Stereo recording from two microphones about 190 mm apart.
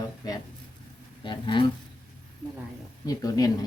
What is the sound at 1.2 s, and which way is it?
Speech, 25° left (ahead or behind).